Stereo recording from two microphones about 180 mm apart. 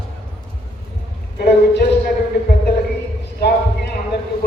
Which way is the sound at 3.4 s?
65° left (ahead or behind).